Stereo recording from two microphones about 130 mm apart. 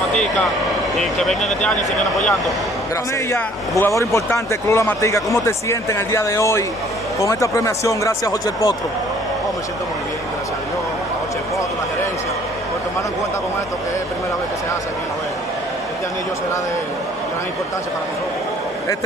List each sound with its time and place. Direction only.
0.9 s speech: centre (ahead or behind)
3.3 s speech: 20° left (ahead or behind)